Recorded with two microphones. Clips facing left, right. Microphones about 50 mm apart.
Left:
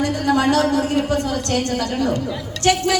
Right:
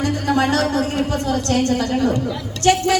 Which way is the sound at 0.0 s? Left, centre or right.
Right.